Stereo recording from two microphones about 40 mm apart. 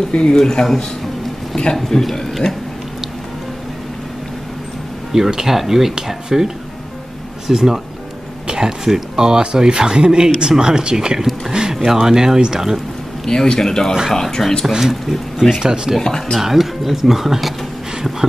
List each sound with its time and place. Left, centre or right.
0.1 s speech: centre
1.8 s speech: centre
5.1 s speech: centre
11.2 s speech: centre
13.2 s speech: centre
14.7 s speech: centre
16.0 s speech: centre
16.3 s speech: centre